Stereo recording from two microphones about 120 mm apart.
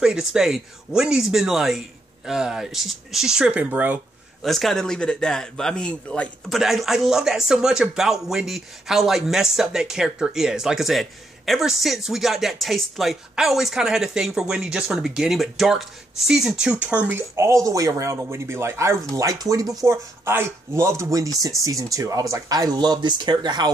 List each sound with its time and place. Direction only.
0.0 s a man's voice: 5° right (ahead or behind)
4.4 s a man's voice: centre (ahead or behind)
6.5 s a man's voice: centre (ahead or behind)
17.4 s speech: 25° right (ahead or behind)